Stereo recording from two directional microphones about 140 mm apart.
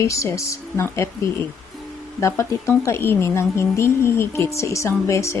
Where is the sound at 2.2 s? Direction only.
20° left (ahead or behind).